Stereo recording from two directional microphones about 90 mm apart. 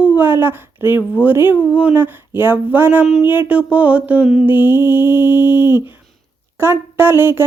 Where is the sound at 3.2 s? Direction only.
25° right (ahead or behind).